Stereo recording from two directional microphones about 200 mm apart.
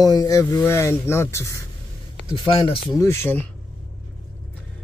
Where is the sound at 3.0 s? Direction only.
15° left (ahead or behind).